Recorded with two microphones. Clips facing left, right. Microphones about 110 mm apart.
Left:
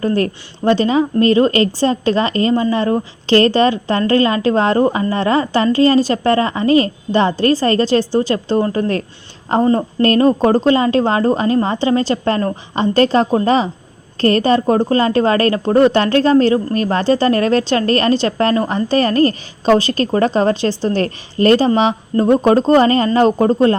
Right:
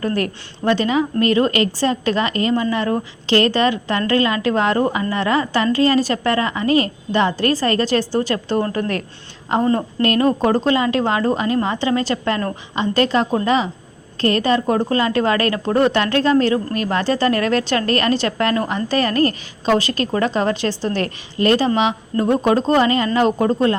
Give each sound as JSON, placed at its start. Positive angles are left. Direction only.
{"t": 0.0, "sound": "a woman's voice", "side_deg": 30}